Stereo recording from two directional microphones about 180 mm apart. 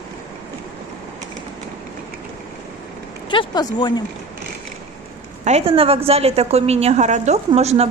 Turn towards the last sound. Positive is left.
turn(degrees=-35)  # may be behind; listen again after turning